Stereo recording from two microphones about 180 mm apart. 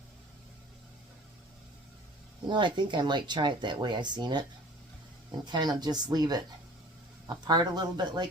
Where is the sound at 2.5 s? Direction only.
25° right (ahead or behind).